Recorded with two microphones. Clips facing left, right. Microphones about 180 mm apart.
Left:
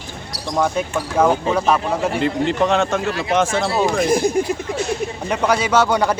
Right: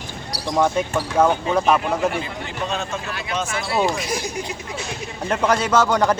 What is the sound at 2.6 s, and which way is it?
Speech, 80° left.